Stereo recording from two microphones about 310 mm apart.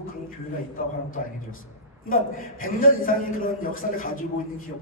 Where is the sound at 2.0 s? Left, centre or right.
Left.